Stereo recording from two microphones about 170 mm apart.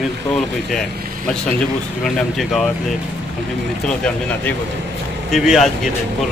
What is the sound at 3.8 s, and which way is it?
A man's voice, 5° left (ahead or behind).